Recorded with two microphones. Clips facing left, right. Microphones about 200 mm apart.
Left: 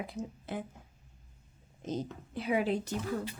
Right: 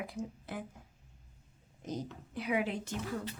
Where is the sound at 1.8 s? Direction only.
25° left (ahead or behind).